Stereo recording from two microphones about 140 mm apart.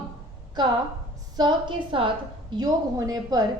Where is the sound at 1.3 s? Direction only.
35° right (ahead or behind).